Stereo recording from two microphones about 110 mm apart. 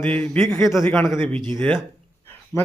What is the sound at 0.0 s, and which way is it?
A man's voice, 15° left (ahead or behind).